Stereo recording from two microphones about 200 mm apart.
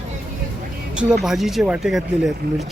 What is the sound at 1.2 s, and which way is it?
Speech, centre (ahead or behind).